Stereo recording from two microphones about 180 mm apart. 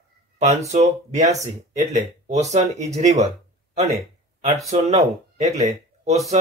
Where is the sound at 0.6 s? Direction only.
40° right (ahead or behind).